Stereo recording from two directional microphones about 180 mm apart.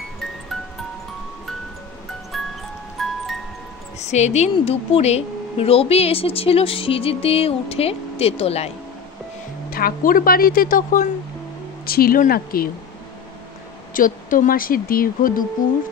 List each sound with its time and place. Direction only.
2.3 s music: centre (ahead or behind)
4.0 s a woman's voice: 40° left (ahead or behind)
9.7 s speech: 55° left (ahead or behind)
13.9 s speech: 50° left (ahead or behind)